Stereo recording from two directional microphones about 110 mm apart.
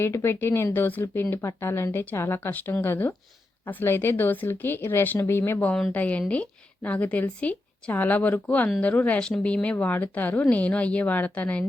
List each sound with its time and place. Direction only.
0.0 s speech: 25° left (ahead or behind)